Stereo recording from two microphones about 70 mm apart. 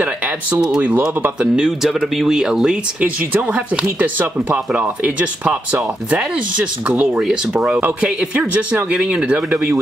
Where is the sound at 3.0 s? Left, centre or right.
Right.